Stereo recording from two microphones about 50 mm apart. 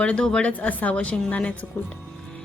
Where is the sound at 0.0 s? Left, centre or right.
Left.